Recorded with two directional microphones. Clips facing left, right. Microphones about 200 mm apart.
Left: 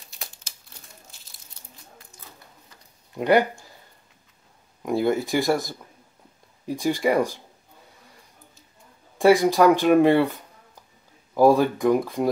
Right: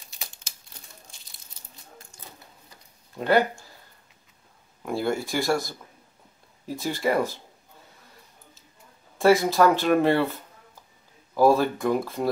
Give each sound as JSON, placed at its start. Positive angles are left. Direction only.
{"t": 3.2, "sound": "speech", "side_deg": 15}
{"t": 4.8, "sound": "speech", "side_deg": 15}
{"t": 9.2, "sound": "speech", "side_deg": 15}
{"t": 11.3, "sound": "speech", "side_deg": 15}